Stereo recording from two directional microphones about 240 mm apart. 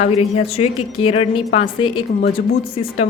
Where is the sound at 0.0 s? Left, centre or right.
Left.